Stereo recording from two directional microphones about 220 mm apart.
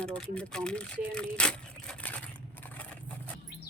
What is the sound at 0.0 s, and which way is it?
Speech, 5° left (ahead or behind).